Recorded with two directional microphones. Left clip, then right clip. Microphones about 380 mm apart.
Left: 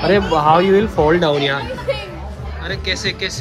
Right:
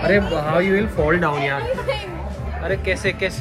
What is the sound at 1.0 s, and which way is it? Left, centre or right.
Speech, centre.